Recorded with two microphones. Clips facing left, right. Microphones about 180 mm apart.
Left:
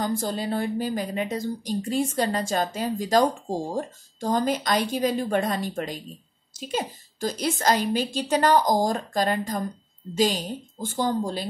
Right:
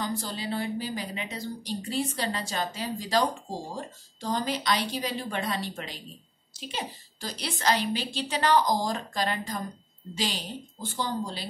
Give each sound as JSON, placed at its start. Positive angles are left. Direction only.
{"t": 0.0, "sound": "a woman's voice", "side_deg": 50}